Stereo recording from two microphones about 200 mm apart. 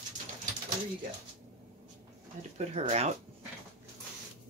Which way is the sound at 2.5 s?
35° right (ahead or behind).